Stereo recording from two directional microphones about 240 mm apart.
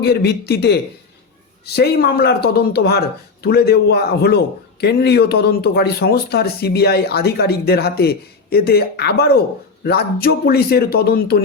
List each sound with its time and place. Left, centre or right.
0.0 s speech: left